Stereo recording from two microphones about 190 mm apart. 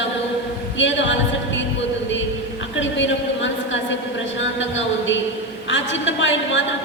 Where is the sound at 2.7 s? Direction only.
80° left.